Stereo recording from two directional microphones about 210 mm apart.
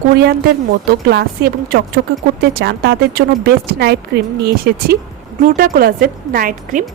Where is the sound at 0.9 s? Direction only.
50° right (ahead or behind).